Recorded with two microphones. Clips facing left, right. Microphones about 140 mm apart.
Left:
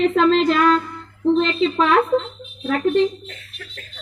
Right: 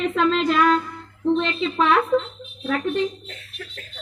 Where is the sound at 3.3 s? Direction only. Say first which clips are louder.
Right 1 dB; 25° right (ahead or behind).